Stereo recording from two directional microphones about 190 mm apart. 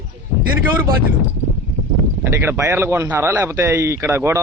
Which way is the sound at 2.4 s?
10° right (ahead or behind).